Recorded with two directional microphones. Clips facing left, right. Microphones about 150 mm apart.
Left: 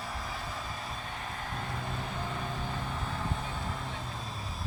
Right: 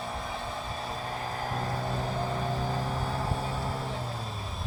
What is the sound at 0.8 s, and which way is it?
Vehicle, 30° right (ahead or behind).